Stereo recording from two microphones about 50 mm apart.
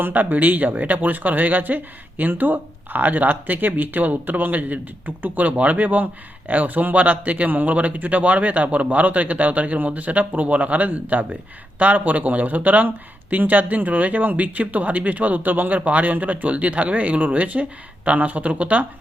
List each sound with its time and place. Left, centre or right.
0.0 s speech: right